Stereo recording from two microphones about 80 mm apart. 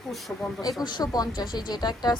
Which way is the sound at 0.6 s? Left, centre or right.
Left.